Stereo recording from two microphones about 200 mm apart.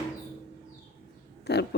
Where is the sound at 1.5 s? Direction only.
55° left (ahead or behind).